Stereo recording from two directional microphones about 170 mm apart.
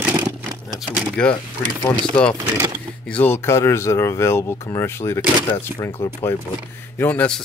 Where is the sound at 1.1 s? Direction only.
10° left (ahead or behind).